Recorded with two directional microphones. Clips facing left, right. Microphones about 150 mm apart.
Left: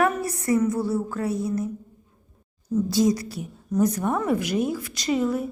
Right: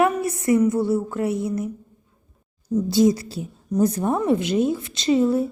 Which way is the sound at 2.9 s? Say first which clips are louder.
Right 5 dB; 25° right (ahead or behind).